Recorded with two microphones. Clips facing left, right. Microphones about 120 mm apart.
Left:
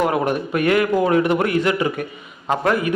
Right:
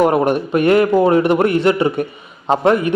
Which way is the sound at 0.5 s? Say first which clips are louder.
Right 5 dB; 30° right (ahead or behind).